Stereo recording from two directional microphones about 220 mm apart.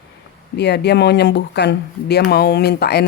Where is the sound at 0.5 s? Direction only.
50° left (ahead or behind).